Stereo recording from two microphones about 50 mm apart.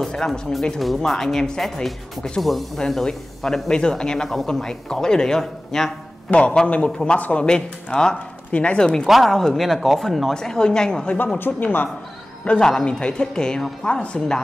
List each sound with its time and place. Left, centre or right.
0.3 s a woman's voice: centre
6.3 s speech: centre
7.4 s a woman's voice: centre
9.0 s speech: centre
10.3 s a woman's voice: centre
11.6 s speech: left
12.4 s a woman's voice: centre